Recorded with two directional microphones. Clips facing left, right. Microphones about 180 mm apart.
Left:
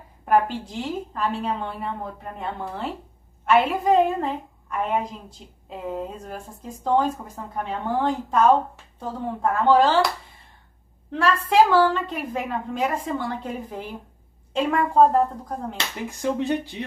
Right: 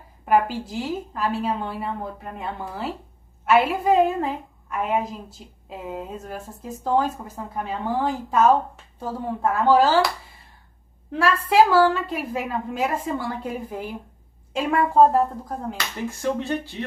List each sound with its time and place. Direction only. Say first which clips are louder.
0.2 s a woman's voice: even; 5° right (ahead or behind)
11.1 s a woman's voice: even; 10° right (ahead or behind)
16.1 s speech: left 2 dB; 15° left (ahead or behind)